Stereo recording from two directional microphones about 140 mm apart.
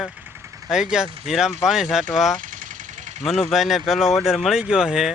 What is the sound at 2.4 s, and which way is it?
Vehicle, 70° right (ahead or behind).